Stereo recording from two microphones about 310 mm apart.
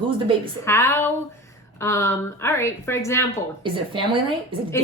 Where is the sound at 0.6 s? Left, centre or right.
Centre.